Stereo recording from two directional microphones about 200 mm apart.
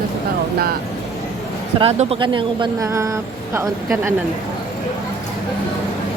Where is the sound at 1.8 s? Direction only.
30° right (ahead or behind); by 3.7 s 15° right (ahead or behind).